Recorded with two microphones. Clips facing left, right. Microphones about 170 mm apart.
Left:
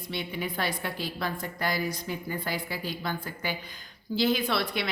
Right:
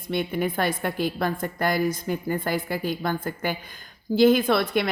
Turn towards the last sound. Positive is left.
turn(degrees=-50)  # may be behind; listen again after turning